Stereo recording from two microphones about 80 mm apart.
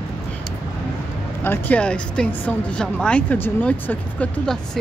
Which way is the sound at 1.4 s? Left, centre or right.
Left.